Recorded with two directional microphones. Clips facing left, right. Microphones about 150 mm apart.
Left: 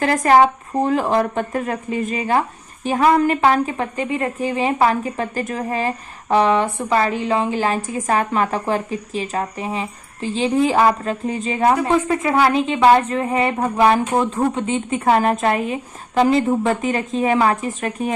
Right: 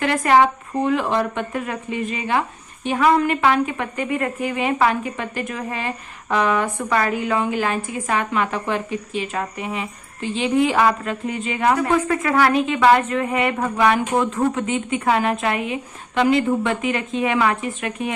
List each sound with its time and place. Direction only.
0.0 s a woman's voice: 35° left (ahead or behind)